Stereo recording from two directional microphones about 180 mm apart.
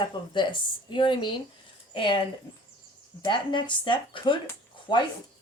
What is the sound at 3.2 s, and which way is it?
Speech, 25° left (ahead or behind).